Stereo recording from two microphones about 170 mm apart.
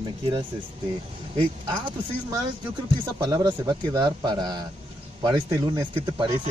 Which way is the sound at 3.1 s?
25° right (ahead or behind).